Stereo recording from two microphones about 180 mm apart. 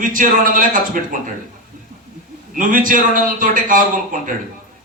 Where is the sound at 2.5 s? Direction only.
50° right (ahead or behind).